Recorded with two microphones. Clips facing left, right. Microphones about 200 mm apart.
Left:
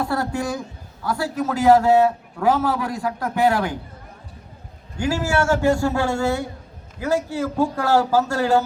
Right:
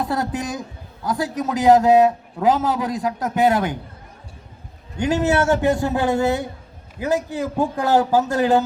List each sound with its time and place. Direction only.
0.0 s a sound: 20° right (ahead or behind)
1.0 s a man's voice: 15° right (ahead or behind)
4.9 s a man's voice: 20° right (ahead or behind)